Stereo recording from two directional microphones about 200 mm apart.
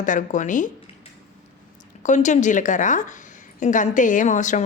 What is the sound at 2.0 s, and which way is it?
Speech, 40° left (ahead or behind).